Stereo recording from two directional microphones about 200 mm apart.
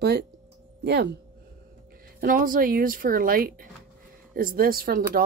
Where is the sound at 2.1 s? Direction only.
45° right (ahead or behind).